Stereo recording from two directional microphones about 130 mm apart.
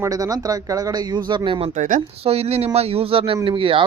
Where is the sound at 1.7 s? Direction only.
85° right.